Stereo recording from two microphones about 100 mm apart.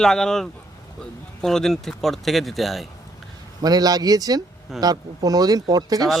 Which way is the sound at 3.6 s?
40° right (ahead or behind).